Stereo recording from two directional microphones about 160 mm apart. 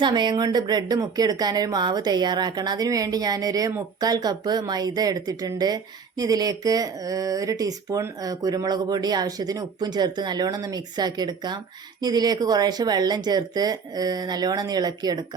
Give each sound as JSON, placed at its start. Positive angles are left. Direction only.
{"t": 0.0, "sound": "speech", "side_deg": -30}